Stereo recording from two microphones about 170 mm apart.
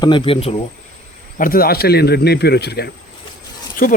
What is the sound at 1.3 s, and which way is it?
Speech, 55° left (ahead or behind).